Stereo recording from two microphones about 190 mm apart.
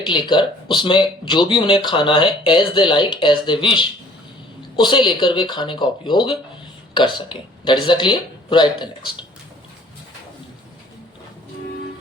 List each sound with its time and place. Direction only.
0.0 s speech: 25° left (ahead or behind)